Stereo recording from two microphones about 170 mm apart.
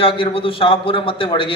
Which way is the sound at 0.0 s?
30° left (ahead or behind).